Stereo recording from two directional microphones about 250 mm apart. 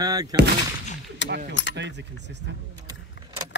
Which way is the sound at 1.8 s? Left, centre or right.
Right.